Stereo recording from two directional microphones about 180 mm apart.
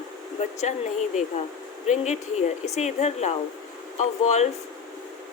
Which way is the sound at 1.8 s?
40° left (ahead or behind).